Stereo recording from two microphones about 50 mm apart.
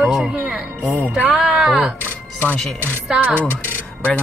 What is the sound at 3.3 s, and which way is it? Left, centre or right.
Speech, left.